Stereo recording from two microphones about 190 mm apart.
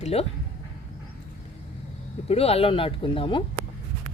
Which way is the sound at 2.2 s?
30° left (ahead or behind).